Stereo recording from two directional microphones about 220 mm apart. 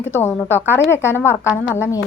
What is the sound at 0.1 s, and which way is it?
Speech, 10° left (ahead or behind).